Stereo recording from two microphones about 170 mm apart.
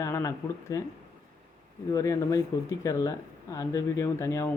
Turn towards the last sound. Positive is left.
turn(degrees=15)  # may be behind; listen again after turning